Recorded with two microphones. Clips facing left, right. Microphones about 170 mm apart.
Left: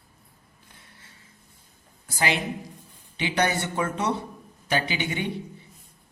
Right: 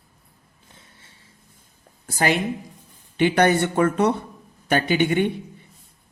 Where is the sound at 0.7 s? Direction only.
25° right (ahead or behind).